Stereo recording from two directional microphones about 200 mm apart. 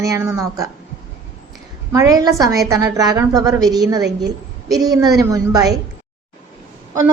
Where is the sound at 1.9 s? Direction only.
15° right (ahead or behind).